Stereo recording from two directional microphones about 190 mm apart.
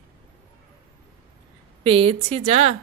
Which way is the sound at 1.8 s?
30° right (ahead or behind).